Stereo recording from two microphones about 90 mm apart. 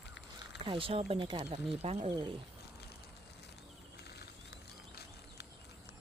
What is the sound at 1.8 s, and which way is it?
Speech, 90° right.